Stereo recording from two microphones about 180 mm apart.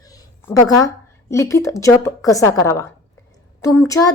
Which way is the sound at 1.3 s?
15° left (ahead or behind).